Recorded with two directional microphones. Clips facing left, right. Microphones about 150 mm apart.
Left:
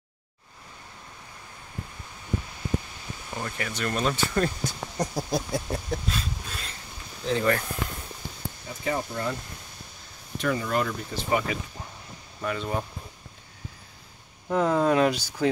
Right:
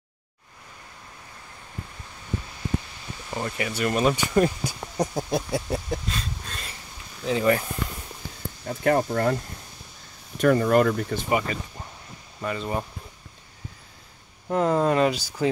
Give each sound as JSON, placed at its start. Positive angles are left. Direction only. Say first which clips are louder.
{"t": 3.3, "sound": "speech", "louder": "right 4 dB", "side_deg": -10}
{"t": 8.6, "sound": "speech", "louder": "right 8 dB", "side_deg": -60}
{"t": 10.4, "sound": "speech", "louder": "right 8 dB", "side_deg": -50}
{"t": 11.5, "sound": "speech", "louder": "even", "side_deg": 5}
{"t": 14.5, "sound": "speech", "louder": "right 1 dB", "side_deg": 0}